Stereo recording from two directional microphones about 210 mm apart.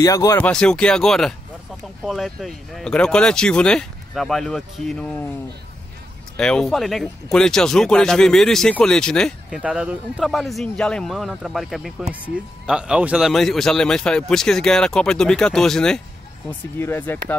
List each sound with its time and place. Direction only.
0.0 s speech: 15° left (ahead or behind)
0.4 s speech: 5° left (ahead or behind)
6.3 s speech: 5° left (ahead or behind)